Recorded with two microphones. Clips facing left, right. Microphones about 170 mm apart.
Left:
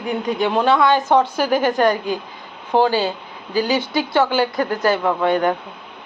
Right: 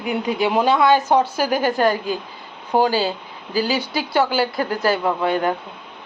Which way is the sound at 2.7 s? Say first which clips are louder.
Left 1 dB; 10° right (ahead or behind).